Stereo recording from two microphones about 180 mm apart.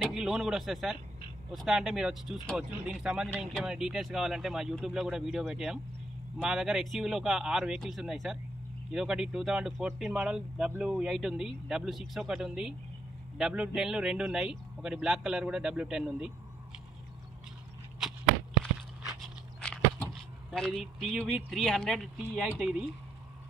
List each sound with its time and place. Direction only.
0.0 s speech: 5° right (ahead or behind)
18.0 s a sound: centre (ahead or behind)
19.2 s speech: centre (ahead or behind)